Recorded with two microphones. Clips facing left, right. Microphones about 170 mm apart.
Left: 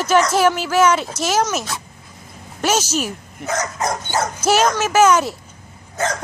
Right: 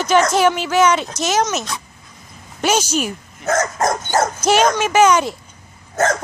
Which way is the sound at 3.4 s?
50° right (ahead or behind).